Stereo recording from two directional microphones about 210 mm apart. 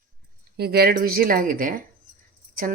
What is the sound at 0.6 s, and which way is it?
A woman's voice, 50° right (ahead or behind).